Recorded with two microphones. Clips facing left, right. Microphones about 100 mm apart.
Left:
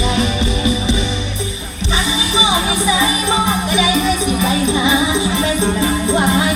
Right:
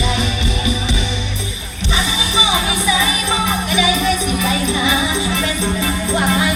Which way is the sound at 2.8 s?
30° left (ahead or behind).